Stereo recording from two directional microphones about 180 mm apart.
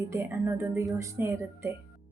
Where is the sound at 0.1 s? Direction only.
10° right (ahead or behind).